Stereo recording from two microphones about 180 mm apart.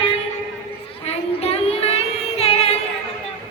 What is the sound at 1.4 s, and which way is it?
Child singing, 35° left (ahead or behind).